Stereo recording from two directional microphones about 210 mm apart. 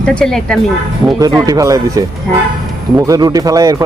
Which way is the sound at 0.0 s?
5° left (ahead or behind).